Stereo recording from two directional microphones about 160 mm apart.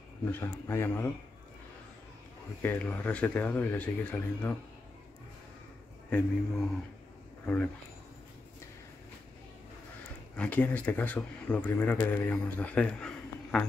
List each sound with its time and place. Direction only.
0.2 s speech: 15° left (ahead or behind)
2.6 s speech: 10° left (ahead or behind)
6.0 s speech: 5° left (ahead or behind)
10.3 s speech: 10° left (ahead or behind)